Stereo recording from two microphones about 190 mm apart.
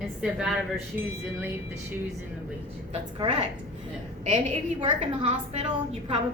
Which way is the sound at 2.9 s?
30° right (ahead or behind).